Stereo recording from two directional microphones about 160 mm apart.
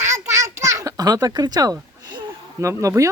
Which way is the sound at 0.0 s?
15° right (ahead or behind).